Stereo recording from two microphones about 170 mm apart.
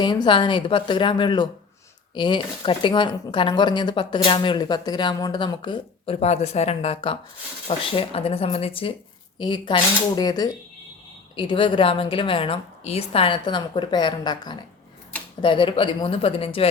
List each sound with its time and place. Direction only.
0.0 s speech: 25° left (ahead or behind)
6.1 s a woman's voice: 40° left (ahead or behind)